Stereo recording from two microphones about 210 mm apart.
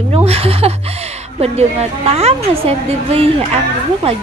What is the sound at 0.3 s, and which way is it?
A woman's voice, 30° right (ahead or behind).